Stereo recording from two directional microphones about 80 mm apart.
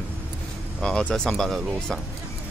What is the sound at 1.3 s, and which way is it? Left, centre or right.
Speech, centre.